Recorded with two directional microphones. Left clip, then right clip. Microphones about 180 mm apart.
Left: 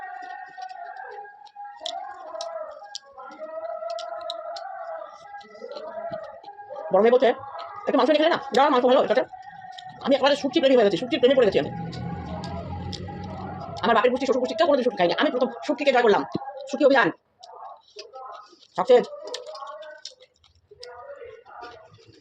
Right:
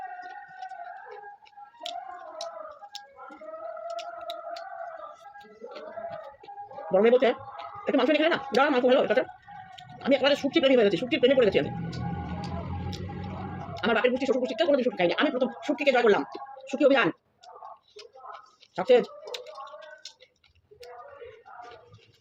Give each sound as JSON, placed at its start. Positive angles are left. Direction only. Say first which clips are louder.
{"t": 3.9, "sound": "a sound", "louder": "left 4 dB", "side_deg": -5}
{"t": 6.9, "sound": "a woman's voice", "louder": "left 3 dB", "side_deg": -5}
{"t": 13.7, "sound": "a sound", "louder": "left 5 dB", "side_deg": -5}
{"t": 14.1, "sound": "a woman's voice", "louder": "left 3 dB", "side_deg": -5}
{"t": 15.6, "sound": "a woman's voice", "louder": "left 3 dB", "side_deg": -25}
{"t": 16.6, "sound": "a woman's voice", "louder": "left 3 dB", "side_deg": -5}
{"t": 18.8, "sound": "a woman's voice", "louder": "left 3 dB", "side_deg": -5}